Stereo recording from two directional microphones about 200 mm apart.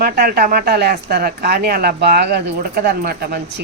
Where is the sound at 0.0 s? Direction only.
45° right (ahead or behind).